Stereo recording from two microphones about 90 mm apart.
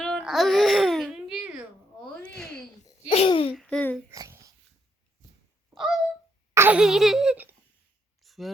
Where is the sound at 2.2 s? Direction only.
10° left (ahead or behind).